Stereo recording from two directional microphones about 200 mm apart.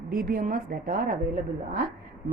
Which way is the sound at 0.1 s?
45° right (ahead or behind).